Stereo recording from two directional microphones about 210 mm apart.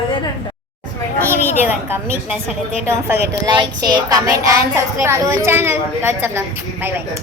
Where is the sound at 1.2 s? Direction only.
10° right (ahead or behind).